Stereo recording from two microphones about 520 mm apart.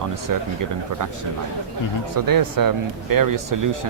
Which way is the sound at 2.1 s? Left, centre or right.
Right.